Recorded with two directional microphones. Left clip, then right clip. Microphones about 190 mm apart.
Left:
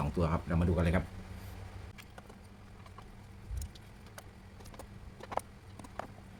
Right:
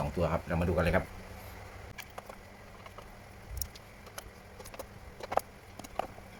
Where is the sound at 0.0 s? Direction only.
10° left (ahead or behind).